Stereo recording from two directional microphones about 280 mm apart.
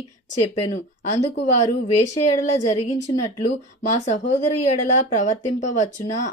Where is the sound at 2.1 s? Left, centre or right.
Left.